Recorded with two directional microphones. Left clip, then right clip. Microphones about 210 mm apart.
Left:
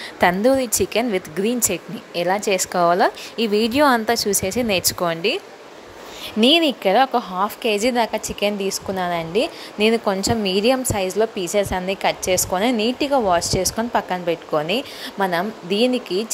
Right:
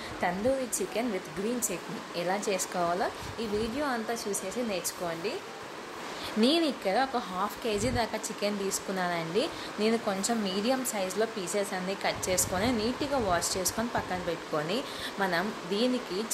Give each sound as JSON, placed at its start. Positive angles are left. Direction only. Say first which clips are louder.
{"t": 0.2, "sound": "speech", "louder": "left 13 dB", "side_deg": 45}
{"t": 6.4, "sound": "a woman's voice", "louder": "left 11 dB", "side_deg": 35}